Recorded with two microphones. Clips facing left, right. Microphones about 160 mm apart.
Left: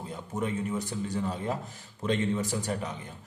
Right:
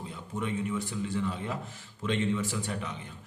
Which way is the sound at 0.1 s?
40° left (ahead or behind).